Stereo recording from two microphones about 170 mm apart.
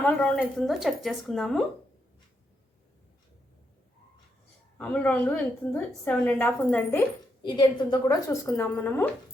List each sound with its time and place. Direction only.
0.0 s speech: 5° left (ahead or behind)
4.8 s a woman's voice: 10° left (ahead or behind)
7.4 s a woman's voice: 25° left (ahead or behind); by 9.0 s 10° left (ahead or behind)